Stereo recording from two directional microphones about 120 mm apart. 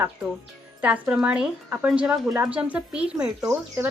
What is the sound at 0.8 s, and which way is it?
A woman's voice, 10° right (ahead or behind).